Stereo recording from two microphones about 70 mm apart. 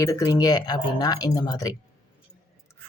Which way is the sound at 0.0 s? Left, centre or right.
Left.